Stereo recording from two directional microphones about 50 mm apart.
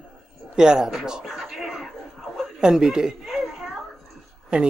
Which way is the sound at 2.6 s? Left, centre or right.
Centre.